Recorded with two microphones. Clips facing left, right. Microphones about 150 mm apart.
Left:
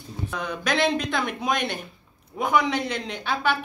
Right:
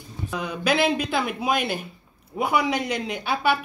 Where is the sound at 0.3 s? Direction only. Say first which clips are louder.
Right 3 dB; 10° right (ahead or behind).